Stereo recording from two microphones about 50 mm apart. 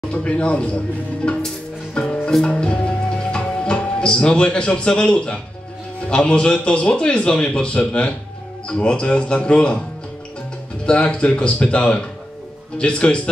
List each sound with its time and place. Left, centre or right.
0.1 s a man's voice: left
2.0 s music: centre
6.0 s a man's voice: centre
10.9 s a man's voice: centre